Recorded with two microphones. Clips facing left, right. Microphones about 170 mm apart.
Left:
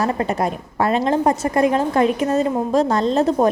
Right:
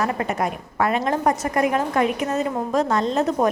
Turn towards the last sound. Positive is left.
turn(degrees=30)  # may be behind; listen again after turning